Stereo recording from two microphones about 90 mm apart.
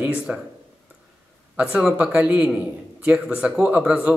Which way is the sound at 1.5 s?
10° right (ahead or behind).